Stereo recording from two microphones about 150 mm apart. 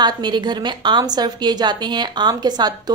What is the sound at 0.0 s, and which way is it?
A woman's voice, 30° right (ahead or behind).